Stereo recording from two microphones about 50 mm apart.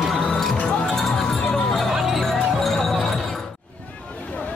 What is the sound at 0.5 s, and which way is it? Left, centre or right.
Music, centre.